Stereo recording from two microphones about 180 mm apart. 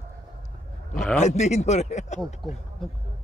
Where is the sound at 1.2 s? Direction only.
40° left (ahead or behind).